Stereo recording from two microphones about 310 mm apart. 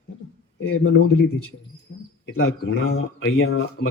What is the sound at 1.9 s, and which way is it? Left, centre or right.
Bird, left.